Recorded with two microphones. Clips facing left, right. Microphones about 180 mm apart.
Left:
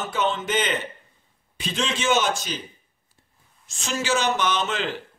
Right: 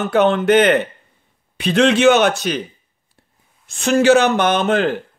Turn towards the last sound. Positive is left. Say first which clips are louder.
# right 10 dB
turn(degrees=-55)  # may be behind; listen again after turning